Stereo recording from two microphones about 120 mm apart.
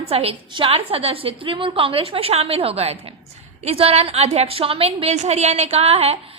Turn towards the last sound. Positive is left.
turn(degrees=-55)  # may be behind; listen again after turning